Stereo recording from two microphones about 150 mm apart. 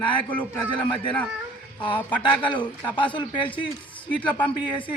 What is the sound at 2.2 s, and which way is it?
A man's voice, 30° left (ahead or behind).